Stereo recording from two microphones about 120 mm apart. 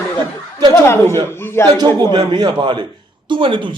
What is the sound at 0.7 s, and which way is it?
Speech, 20° left (ahead or behind).